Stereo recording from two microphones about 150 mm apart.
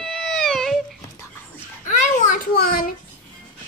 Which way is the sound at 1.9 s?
60° left (ahead or behind).